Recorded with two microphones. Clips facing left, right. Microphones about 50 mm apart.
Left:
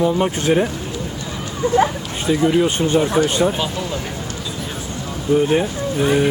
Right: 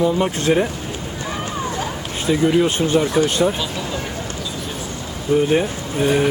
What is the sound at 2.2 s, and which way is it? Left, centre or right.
Speech, centre.